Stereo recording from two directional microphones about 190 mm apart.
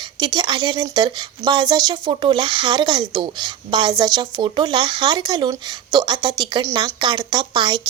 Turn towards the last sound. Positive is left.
turn(degrees=-25)  # may be behind; listen again after turning